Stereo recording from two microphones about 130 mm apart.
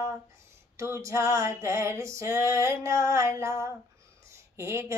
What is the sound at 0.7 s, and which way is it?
Female singing, 20° right (ahead or behind).